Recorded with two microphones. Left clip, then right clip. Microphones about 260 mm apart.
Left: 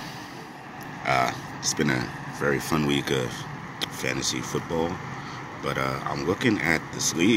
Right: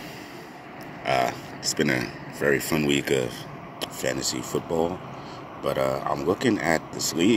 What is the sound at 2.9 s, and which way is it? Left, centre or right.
Speech, left.